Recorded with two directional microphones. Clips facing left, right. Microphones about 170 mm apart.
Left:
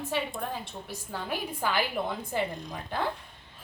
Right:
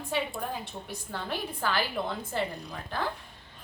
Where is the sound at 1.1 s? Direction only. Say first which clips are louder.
Left 1 dB; 10° left (ahead or behind).